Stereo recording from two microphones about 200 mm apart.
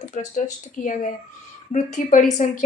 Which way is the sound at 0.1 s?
40° left (ahead or behind).